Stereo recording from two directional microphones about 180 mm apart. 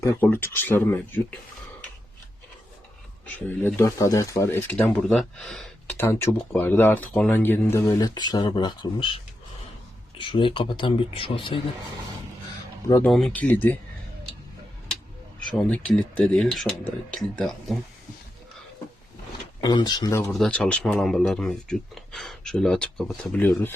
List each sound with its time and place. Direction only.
0.0 s speech: 15° left (ahead or behind)
3.3 s speech: 15° left (ahead or behind); by 11.6 s 30° left (ahead or behind)
13.1 s speech: centre (ahead or behind)
15.5 s speech: 5° left (ahead or behind)
19.6 s speech: 25° left (ahead or behind)
20.3 s speech: 5° left (ahead or behind)